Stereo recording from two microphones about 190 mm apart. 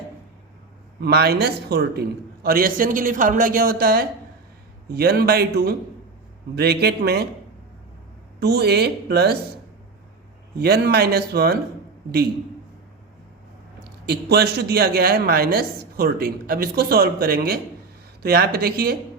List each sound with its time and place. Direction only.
1.0 s a man's voice: 55° right (ahead or behind)
8.4 s speech: 60° right (ahead or behind)
10.6 s speech: 55° right (ahead or behind)
13.8 s a man's voice: 55° right (ahead or behind)